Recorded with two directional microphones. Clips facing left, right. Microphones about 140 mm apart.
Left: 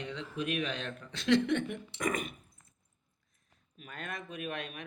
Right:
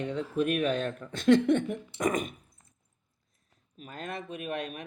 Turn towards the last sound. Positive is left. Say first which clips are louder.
# right 4 dB
turn(degrees=-35)  # may be behind; listen again after turning